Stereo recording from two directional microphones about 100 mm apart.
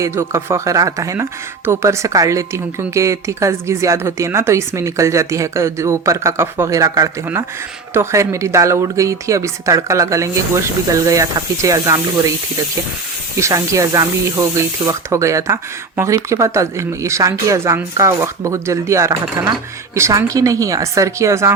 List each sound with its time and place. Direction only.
0.0 s speech: 25° right (ahead or behind)
13.3 s speech: 30° right (ahead or behind)